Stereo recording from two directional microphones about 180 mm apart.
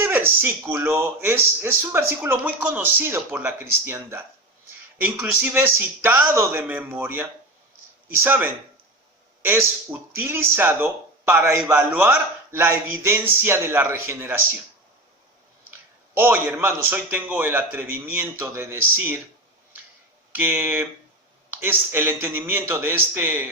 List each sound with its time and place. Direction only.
0.0 s a man's voice: 10° right (ahead or behind)
16.1 s a man's voice: 10° right (ahead or behind)
20.3 s a man's voice: 10° right (ahead or behind)